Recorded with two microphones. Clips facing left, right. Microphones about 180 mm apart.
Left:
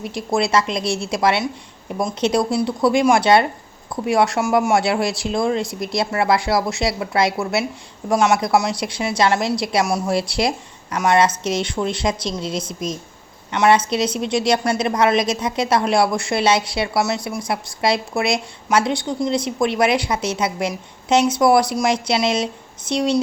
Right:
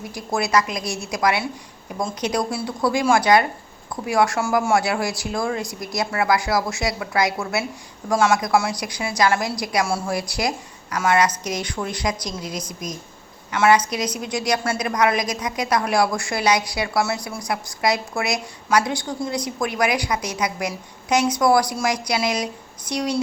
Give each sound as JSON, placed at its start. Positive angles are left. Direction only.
{"t": 0.0, "sound": "a woman's voice", "side_deg": 25}